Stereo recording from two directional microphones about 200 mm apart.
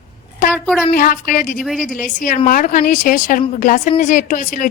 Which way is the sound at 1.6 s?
Centre (ahead or behind).